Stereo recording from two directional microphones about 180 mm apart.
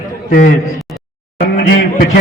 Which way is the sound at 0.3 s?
55° left (ahead or behind).